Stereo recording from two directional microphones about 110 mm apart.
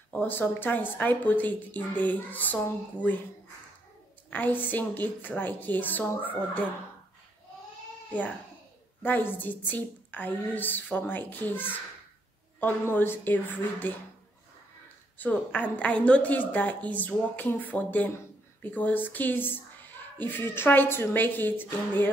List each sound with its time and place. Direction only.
0.1 s a woman's voice: 15° left (ahead or behind)
4.3 s a woman's voice: 15° left (ahead or behind)
8.1 s a child's voice: 15° left (ahead or behind)
15.1 s a woman's voice: 15° left (ahead or behind)